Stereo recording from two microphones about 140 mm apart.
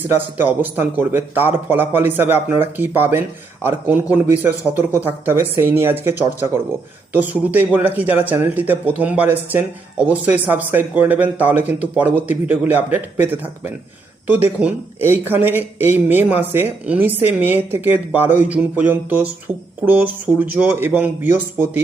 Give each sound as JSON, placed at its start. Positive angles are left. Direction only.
{"t": 0.2, "sound": "speech", "side_deg": -15}